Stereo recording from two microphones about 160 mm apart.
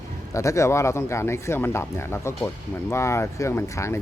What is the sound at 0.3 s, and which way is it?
Speech, 20° left (ahead or behind).